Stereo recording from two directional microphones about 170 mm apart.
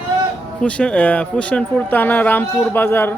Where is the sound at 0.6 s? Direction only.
5° left (ahead or behind).